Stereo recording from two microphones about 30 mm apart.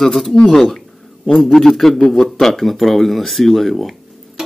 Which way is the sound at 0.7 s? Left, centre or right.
Centre.